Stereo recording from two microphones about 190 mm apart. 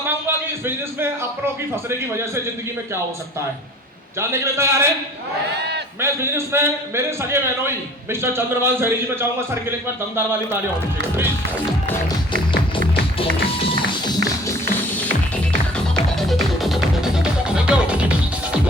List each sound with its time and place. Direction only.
0.0 s a sound: 10° right (ahead or behind)
1.7 s a man's voice: 15° right (ahead or behind)
4.2 s a man's voice: 15° right (ahead or behind)
6.0 s a man's voice: 15° right (ahead or behind)
13.1 s music: 30° left (ahead or behind)
16.2 s music: centre (ahead or behind)